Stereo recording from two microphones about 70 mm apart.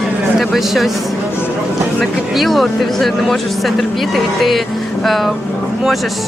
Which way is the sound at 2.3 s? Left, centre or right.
Centre.